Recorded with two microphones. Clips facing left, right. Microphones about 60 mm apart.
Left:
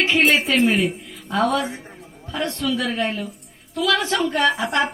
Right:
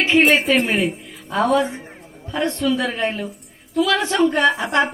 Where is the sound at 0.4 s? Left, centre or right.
Centre.